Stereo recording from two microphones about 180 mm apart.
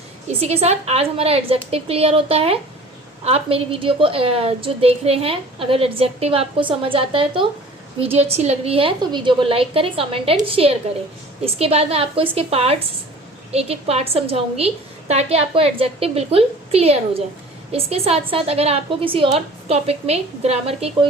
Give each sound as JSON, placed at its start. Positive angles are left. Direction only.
{"t": 0.3, "sound": "a woman's voice", "side_deg": -35}